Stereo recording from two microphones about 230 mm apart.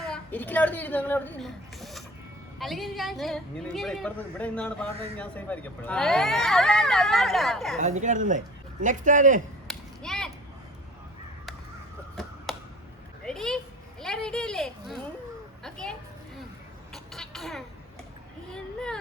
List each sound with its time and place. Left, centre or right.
0.1 s speech: centre
7.8 s a man's voice: right
9.6 s a sound: centre
12.5 s arrow: centre
13.2 s a sound: centre
16.9 s vehicle: centre